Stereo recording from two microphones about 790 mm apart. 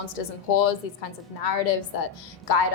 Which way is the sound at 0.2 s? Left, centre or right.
Left.